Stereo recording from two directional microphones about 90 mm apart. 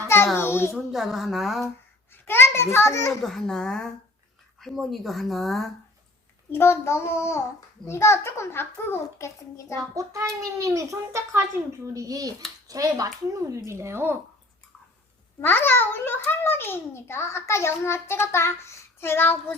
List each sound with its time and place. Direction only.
0.3 s a child's voice: 25° left (ahead or behind)
0.7 s speech: 5° right (ahead or behind)
2.2 s a child's voice: 25° left (ahead or behind)
3.2 s a child's voice: 5° left (ahead or behind)
6.5 s a child's voice: 30° left (ahead or behind)
9.9 s a child's voice: 35° right (ahead or behind)
15.4 s a child's voice: 25° left (ahead or behind)